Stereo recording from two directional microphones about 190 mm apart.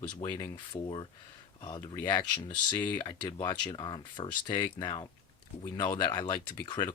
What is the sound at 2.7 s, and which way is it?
Speech, 10° left (ahead or behind).